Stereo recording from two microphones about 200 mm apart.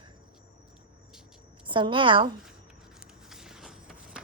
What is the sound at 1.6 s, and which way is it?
Speech, 25° right (ahead or behind).